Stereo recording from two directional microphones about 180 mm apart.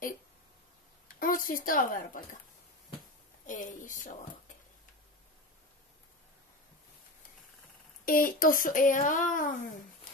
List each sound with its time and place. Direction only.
1.2 s speech: 50° left (ahead or behind)
3.4 s speech: 45° left (ahead or behind)
8.0 s speech: 50° left (ahead or behind)